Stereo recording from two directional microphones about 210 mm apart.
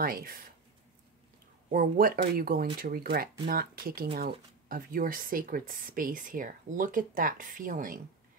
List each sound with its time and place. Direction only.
0.0 s speech: 45° right (ahead or behind)
1.7 s speech: 45° right (ahead or behind)